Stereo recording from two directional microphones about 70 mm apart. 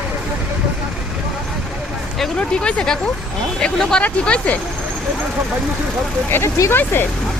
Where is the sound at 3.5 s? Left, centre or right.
Centre.